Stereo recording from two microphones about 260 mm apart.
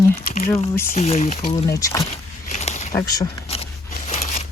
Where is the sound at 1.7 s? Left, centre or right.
Centre.